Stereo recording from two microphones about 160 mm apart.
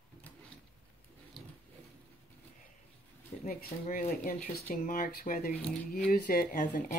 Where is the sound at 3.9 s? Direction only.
65° left (ahead or behind).